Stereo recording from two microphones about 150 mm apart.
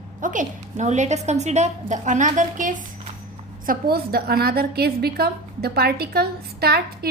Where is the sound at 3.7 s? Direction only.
90° right.